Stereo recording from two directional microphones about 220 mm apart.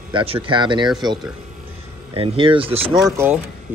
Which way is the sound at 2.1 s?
25° right (ahead or behind).